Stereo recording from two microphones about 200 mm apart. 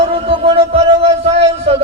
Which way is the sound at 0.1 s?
30° right (ahead or behind).